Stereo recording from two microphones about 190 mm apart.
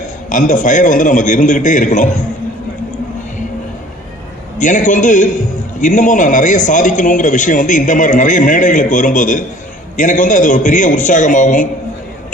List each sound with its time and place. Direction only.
0.3 s a man's voice: 40° left (ahead or behind)
4.5 s a man's voice: 40° left (ahead or behind)